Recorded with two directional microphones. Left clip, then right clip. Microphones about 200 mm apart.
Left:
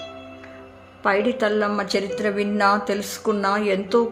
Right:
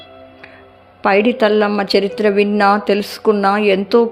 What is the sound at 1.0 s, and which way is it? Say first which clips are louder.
A woman's voice: right 7 dB; 35° right (ahead or behind).